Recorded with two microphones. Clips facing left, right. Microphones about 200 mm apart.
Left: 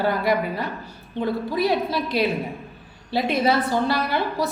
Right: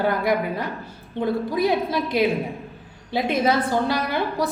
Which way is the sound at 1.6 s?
20° right (ahead or behind).